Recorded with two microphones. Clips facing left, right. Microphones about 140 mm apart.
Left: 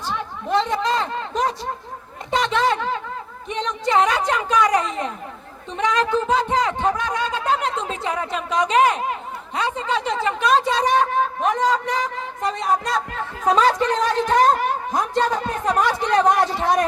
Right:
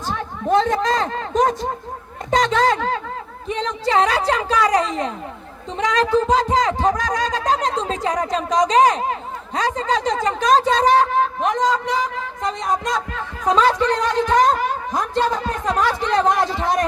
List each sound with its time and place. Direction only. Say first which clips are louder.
0.1 s a sound: right 4 dB; 45° right (ahead or behind)
2.3 s speech: right 3 dB; 40° right (ahead or behind)
11.6 s a woman's voice: right 1 dB; 10° left (ahead or behind)